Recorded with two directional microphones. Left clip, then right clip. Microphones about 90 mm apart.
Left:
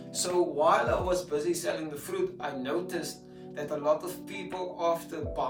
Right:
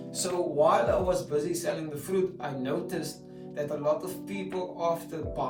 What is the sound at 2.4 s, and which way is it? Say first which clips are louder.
Speech: even; 30° left (ahead or behind).